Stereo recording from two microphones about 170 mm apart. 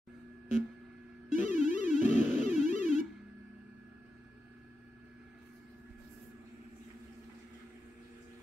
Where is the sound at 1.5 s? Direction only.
45° left (ahead or behind).